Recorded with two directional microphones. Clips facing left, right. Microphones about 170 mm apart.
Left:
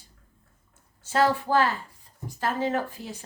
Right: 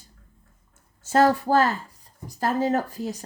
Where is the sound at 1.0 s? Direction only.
45° right (ahead or behind).